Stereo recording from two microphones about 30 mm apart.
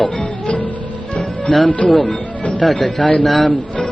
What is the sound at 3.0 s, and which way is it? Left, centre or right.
Speech, left.